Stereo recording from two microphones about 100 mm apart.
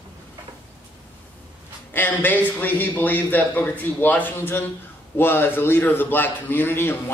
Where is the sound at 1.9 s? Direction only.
20° left (ahead or behind).